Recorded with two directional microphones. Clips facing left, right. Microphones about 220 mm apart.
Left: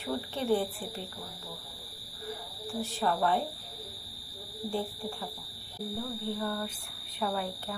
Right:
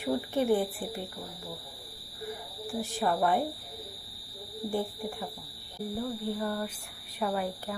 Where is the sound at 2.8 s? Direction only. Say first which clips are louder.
Right 1 dB; 15° right (ahead or behind).